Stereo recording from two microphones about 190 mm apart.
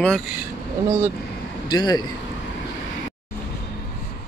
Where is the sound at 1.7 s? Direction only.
20° left (ahead or behind).